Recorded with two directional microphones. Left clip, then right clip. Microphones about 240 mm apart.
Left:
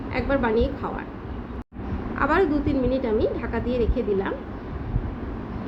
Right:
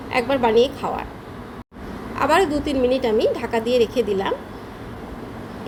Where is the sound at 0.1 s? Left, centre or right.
Centre.